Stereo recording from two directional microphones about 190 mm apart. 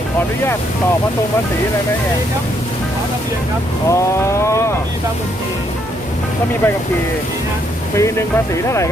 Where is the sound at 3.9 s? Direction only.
15° left (ahead or behind).